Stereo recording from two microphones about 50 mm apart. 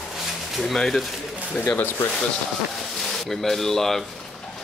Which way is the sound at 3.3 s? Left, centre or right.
Centre.